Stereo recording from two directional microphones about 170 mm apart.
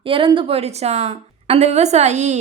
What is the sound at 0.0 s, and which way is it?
A woman's voice, 30° right (ahead or behind).